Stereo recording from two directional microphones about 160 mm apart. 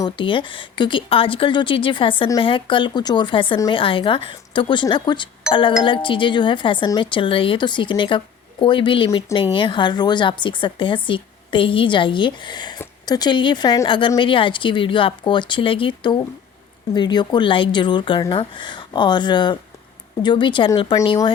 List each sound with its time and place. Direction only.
0.0 s speech: 30° left (ahead or behind)